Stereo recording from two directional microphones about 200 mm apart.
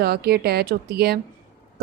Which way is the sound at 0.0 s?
50° right (ahead or behind).